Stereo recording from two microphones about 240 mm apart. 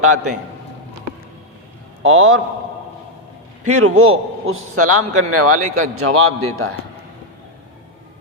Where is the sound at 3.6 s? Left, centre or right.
Right.